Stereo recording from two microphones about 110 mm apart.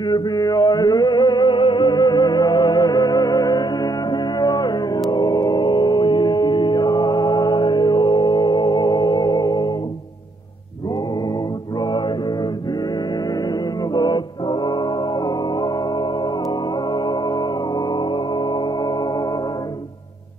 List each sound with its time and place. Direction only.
0.0 s music: 40° left (ahead or behind)
11.8 s mantra: 40° left (ahead or behind)
13.3 s music: 35° left (ahead or behind)